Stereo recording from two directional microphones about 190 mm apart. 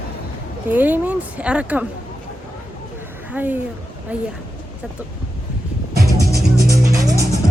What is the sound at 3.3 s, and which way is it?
Speech, 10° right (ahead or behind).